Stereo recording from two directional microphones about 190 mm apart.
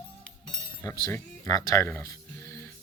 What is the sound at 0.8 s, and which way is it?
Music, 15° left (ahead or behind).